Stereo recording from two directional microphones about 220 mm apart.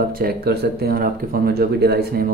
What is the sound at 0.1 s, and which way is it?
Speech, 45° right (ahead or behind).